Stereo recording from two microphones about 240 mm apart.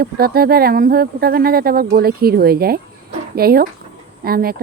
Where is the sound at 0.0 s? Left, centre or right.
Right.